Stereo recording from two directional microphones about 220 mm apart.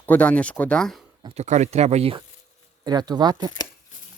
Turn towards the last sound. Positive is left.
turn(degrees=-20)  # may be behind; listen again after turning